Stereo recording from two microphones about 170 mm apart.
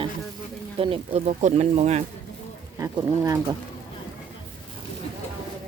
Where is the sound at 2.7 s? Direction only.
15° right (ahead or behind).